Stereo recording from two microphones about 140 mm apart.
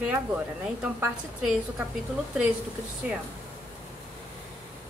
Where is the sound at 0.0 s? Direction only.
10° right (ahead or behind).